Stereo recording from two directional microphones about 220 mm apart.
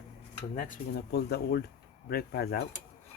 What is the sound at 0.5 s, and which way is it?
Speech, 40° left (ahead or behind).